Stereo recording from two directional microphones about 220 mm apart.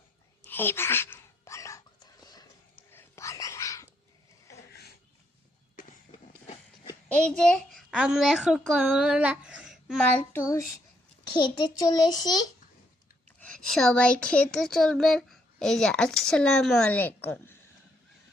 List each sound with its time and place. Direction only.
0.4 s whispering: 10° left (ahead or behind)
6.1 s train: 25° left (ahead or behind)
7.1 s a child's voice: 5° left (ahead or behind)
11.3 s a child's voice: 20° left (ahead or behind)
13.4 s speech: 5° left (ahead or behind)